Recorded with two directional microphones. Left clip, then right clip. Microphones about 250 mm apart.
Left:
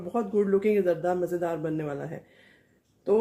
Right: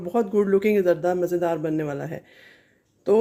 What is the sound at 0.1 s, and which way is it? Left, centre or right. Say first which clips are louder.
Speech: right 4 dB; right.